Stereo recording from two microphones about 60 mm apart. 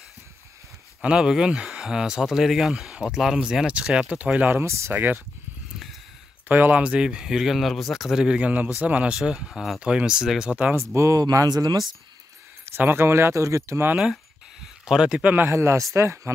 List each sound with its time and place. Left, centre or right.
1.0 s speech: centre
4.6 s speech: right
4.9 s speech: right
6.5 s speech: right
6.8 s speech: centre
8.2 s speech: centre
9.8 s speech: centre
10.5 s speech: right
10.8 s speech: right
11.1 s speech: right
12.6 s speech: right
14.9 s speech: centre
15.5 s speech: right